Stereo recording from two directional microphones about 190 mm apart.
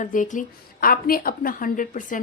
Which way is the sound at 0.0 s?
45° left (ahead or behind).